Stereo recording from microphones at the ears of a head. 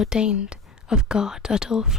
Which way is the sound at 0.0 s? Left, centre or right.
Left.